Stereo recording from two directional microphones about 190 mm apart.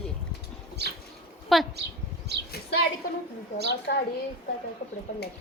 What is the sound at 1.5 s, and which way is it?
Speech, centre (ahead or behind).